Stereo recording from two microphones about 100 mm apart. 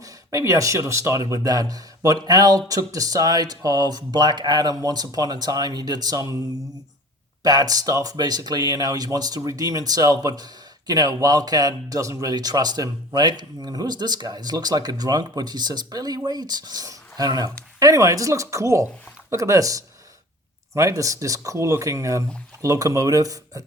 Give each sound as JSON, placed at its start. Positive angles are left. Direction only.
{"t": 0.0, "sound": "speech", "side_deg": -30}
{"t": 7.4, "sound": "speech", "side_deg": -40}